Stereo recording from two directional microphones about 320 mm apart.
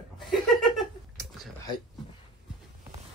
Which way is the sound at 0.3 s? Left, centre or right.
Centre.